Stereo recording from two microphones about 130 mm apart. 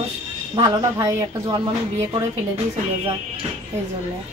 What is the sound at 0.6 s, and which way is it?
Speech, 35° right (ahead or behind).